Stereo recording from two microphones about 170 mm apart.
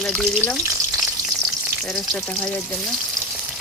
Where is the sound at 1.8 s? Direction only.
Centre (ahead or behind).